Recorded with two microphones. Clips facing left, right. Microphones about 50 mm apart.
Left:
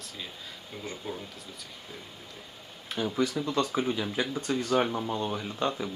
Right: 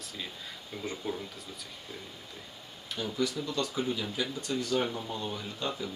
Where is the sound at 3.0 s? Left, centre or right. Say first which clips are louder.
Left 4 dB; left.